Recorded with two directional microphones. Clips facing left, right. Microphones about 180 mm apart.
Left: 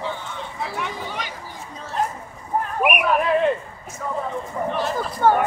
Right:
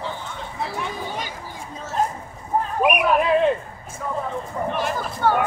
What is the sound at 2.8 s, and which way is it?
Speech, 20° right (ahead or behind).